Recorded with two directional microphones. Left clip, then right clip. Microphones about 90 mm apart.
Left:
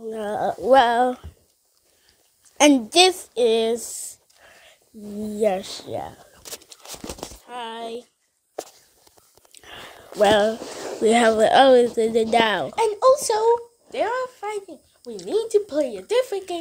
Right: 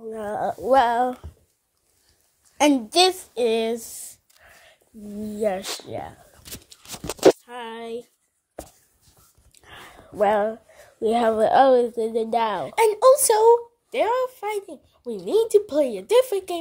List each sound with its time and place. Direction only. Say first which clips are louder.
0.3 s speech: left 3 dB; 25° left (ahead or behind)
2.5 s a child's voice: left 3 dB; 30° left (ahead or behind)
3.0 s child singing: left 2 dB; 15° left (ahead or behind)
5.8 s speech: left 3 dB; 45° left (ahead or behind)
7.4 s speech: left 2 dB; 50° left (ahead or behind)
9.5 s a sound: left 4 dB; 90° left
10.1 s speech: left 3 dB; 50° left (ahead or behind)
11.1 s speech: left 3 dB; 15° left (ahead or behind)
12.7 s a woman's voice: right 3 dB; 65° right (ahead or behind)